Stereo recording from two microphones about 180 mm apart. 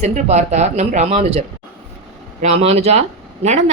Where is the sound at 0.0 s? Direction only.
40° right (ahead or behind).